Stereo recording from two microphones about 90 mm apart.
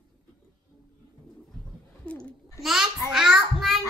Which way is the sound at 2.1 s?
10° left (ahead or behind).